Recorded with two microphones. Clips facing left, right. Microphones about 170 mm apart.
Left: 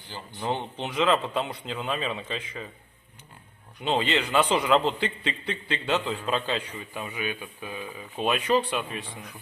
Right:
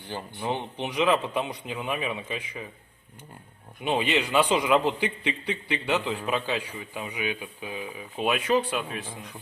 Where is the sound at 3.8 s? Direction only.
15° right (ahead or behind).